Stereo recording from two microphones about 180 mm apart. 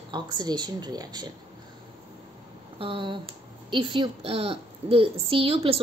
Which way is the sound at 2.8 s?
30° right (ahead or behind).